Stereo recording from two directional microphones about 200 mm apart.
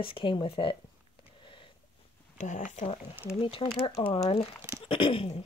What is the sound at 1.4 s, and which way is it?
Sniff, 25° left (ahead or behind).